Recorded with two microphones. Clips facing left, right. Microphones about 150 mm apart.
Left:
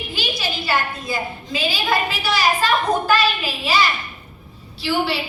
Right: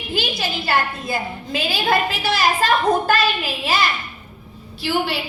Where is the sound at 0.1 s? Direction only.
55° right (ahead or behind).